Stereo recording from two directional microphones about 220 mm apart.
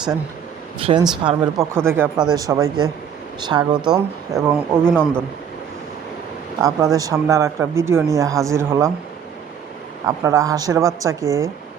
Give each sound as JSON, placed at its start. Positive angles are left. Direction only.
{"t": 0.8, "sound": "a woman's voice", "side_deg": -25}
{"t": 4.9, "sound": "speech", "side_deg": 5}
{"t": 6.6, "sound": "a woman's voice", "side_deg": -15}
{"t": 10.1, "sound": "a woman's voice", "side_deg": -15}